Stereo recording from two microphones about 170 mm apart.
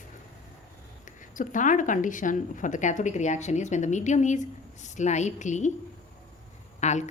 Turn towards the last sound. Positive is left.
turn(degrees=40)  # may be behind; listen again after turning